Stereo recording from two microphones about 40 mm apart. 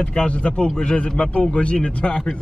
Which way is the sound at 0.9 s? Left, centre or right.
Left.